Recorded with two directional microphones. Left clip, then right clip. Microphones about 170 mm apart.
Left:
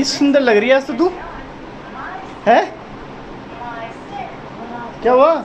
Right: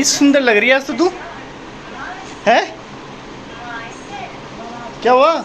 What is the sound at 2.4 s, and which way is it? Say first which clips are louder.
Speech: left 1 dB; centre (ahead or behind).